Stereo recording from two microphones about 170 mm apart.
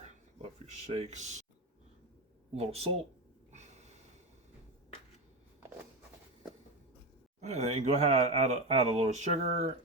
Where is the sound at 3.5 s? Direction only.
40° right (ahead or behind).